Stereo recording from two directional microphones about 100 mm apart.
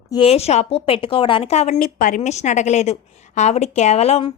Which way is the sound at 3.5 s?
90° left.